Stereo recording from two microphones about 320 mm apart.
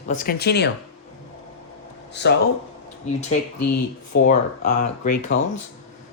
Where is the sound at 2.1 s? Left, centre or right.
Left.